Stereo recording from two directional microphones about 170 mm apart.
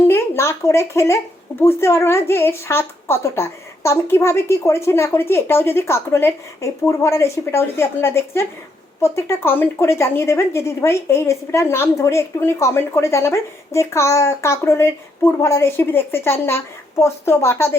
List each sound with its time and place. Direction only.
0.1 s speech: 15° left (ahead or behind)